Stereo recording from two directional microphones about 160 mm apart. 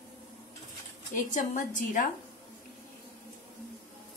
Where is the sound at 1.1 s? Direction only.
55° left (ahead or behind).